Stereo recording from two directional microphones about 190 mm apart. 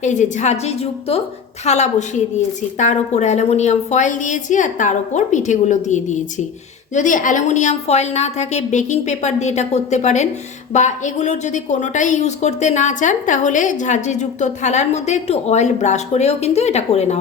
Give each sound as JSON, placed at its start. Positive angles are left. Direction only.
{"t": 0.0, "sound": "a woman's voice", "side_deg": 40}